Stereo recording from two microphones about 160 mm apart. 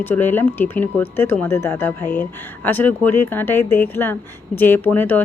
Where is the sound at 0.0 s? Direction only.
10° left (ahead or behind).